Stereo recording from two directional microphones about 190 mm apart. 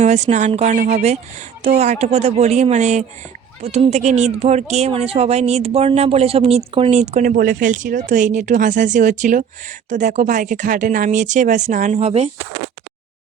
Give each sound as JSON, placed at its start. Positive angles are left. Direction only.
{"t": 0.0, "sound": "speech", "side_deg": -35}